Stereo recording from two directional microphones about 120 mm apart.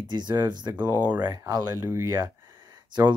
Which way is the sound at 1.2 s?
35° right (ahead or behind).